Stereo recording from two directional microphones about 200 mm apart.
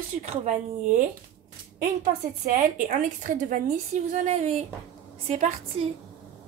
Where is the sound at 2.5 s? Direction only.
40° right (ahead or behind).